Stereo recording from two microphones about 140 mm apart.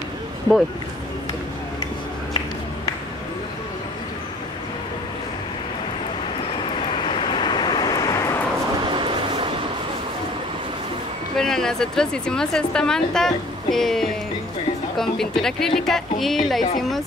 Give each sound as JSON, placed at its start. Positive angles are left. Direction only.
{"t": 0.5, "sound": "speech", "side_deg": -25}
{"t": 6.6, "sound": "vehicle", "side_deg": 40}
{"t": 8.8, "sound": "vehicle", "side_deg": -35}
{"t": 11.3, "sound": "speech", "side_deg": 5}